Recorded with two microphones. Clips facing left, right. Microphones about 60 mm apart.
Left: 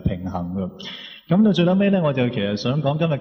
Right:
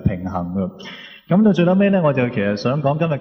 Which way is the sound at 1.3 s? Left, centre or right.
Centre.